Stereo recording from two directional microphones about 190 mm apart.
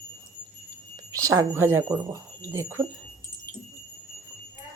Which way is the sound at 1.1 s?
15° right (ahead or behind).